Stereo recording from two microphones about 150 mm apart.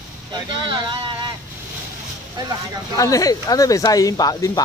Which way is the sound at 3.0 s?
25° left (ahead or behind).